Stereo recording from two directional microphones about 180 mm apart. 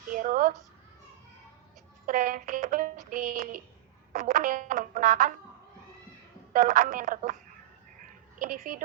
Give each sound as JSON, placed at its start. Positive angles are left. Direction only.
{"t": 0.1, "sound": "a sound", "side_deg": -50}
{"t": 2.0, "sound": "music", "side_deg": -50}
{"t": 6.5, "sound": "music", "side_deg": -45}
{"t": 8.4, "sound": "music", "side_deg": -50}